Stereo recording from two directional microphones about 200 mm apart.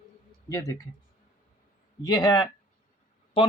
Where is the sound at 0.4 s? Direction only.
15° left (ahead or behind).